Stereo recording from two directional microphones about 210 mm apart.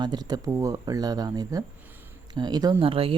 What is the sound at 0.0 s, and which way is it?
Speech, 20° right (ahead or behind).